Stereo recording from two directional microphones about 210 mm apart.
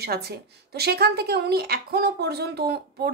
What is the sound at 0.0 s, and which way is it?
Speech, 50° right (ahead or behind).